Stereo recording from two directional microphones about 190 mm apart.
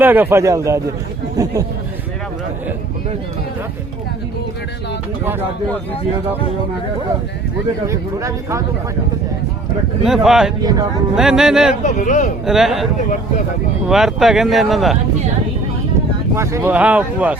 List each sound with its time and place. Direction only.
0.0 s speech: 10° right (ahead or behind)
7.9 s speech: 15° right (ahead or behind)
10.0 s speech: centre (ahead or behind)
10.6 s speech: 20° right (ahead or behind)
11.1 s speech: 5° right (ahead or behind)
11.8 s speech: 40° left (ahead or behind)
12.5 s speech: centre (ahead or behind)
16.3 s speech: 15° right (ahead or behind)